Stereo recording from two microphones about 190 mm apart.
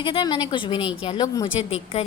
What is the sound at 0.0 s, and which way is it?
A woman's voice, 25° left (ahead or behind).